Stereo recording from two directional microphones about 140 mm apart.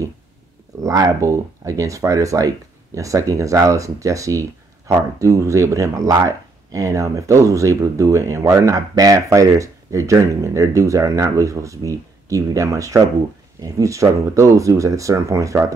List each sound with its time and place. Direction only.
0.8 s speech: 25° right (ahead or behind)